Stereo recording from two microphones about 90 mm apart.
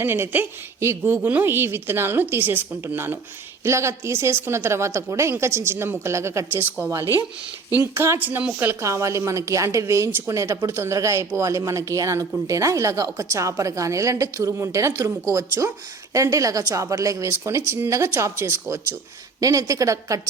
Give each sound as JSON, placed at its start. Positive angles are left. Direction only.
{"t": 0.0, "sound": "a woman's voice", "side_deg": -25}
{"t": 7.8, "sound": "a woman's voice", "side_deg": -30}
{"t": 8.2, "sound": "a woman's voice", "side_deg": -20}
{"t": 8.8, "sound": "a woman's voice", "side_deg": -35}